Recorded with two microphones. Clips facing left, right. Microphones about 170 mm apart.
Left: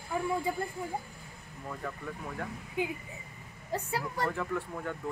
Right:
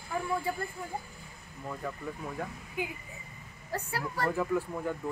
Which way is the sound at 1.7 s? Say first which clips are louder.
Right 2 dB; 5° right (ahead or behind).